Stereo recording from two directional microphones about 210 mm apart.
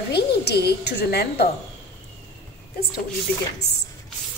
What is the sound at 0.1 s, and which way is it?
A woman's voice, 50° left (ahead or behind).